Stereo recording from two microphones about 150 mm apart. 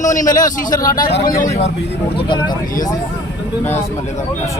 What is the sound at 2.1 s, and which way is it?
Speech, 30° left (ahead or behind).